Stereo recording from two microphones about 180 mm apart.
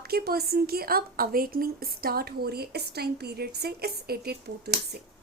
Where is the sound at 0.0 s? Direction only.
60° right (ahead or behind).